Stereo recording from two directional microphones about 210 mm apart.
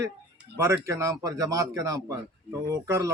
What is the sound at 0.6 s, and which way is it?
Speech, 15° right (ahead or behind).